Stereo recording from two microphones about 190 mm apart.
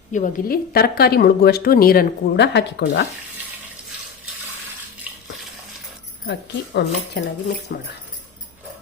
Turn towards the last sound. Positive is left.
turn(degrees=60)  # may be behind; listen again after turning